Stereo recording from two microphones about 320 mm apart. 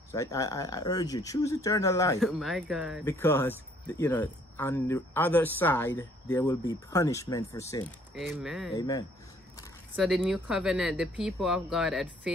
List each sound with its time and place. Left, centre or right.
0.1 s speech: centre
8.1 s speech: centre
8.7 s speech: centre
9.9 s speech: centre